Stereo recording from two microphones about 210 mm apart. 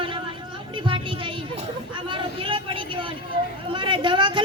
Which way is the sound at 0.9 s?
25° right (ahead or behind).